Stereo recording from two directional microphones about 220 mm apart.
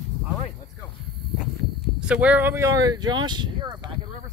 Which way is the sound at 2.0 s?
5° right (ahead or behind).